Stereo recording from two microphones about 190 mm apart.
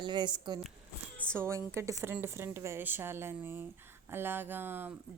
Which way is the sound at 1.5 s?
15° right (ahead or behind).